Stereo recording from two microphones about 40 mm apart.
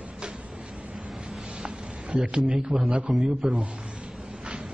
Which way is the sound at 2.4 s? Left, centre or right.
Right.